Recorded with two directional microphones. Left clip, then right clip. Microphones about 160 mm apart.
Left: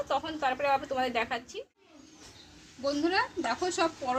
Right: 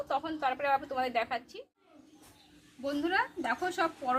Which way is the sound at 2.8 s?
5° right (ahead or behind).